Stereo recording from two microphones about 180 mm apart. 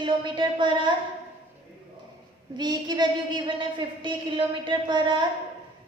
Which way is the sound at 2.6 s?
25° right (ahead or behind).